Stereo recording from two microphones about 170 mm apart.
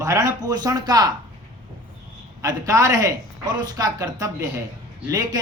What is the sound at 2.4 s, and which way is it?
Speech, 20° right (ahead or behind).